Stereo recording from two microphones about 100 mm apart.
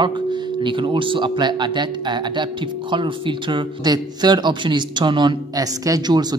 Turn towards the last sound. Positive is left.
turn(degrees=-45)  # may be behind; listen again after turning